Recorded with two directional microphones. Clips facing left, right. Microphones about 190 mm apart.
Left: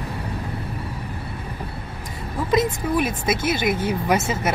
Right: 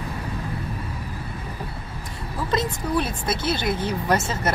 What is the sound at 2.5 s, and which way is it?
Speech, 15° left (ahead or behind).